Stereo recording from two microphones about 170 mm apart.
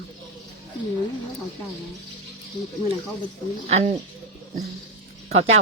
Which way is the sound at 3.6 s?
40° right (ahead or behind).